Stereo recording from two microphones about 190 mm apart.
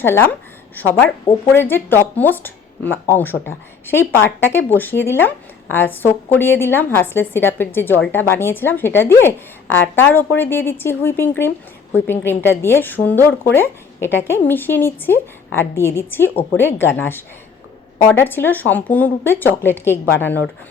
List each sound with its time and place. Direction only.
0.0 s speech: 10° left (ahead or behind)